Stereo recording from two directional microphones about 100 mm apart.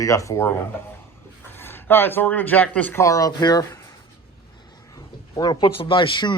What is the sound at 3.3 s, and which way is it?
Speech, 45° left (ahead or behind).